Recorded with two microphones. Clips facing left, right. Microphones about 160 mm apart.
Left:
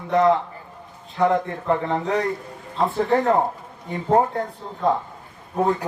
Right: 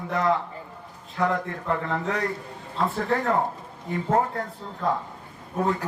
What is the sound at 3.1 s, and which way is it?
Speech, 25° left (ahead or behind).